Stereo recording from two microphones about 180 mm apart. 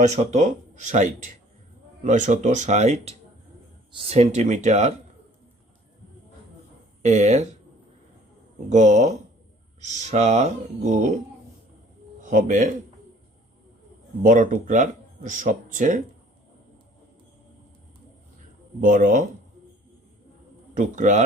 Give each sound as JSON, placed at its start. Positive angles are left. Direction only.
{"t": 0.0, "sound": "speech", "side_deg": -40}
{"t": 7.0, "sound": "speech", "side_deg": -40}
{"t": 8.7, "sound": "speech", "side_deg": -40}
{"t": 12.2, "sound": "speech", "side_deg": -45}
{"t": 14.2, "sound": "speech", "side_deg": -45}
{"t": 18.8, "sound": "speech", "side_deg": -45}
{"t": 20.7, "sound": "speech", "side_deg": -45}